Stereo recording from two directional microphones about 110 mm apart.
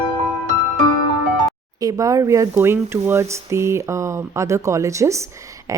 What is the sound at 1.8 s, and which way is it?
Speech, 30° right (ahead or behind).